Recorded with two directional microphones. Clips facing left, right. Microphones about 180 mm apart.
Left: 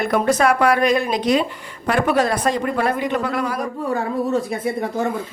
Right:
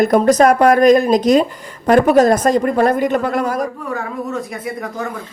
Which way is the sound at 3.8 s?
30° left (ahead or behind).